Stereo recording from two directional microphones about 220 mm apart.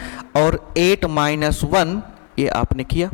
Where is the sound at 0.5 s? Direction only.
10° left (ahead or behind).